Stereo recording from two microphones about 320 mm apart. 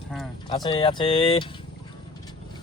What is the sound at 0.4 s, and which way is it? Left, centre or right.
Speech, centre.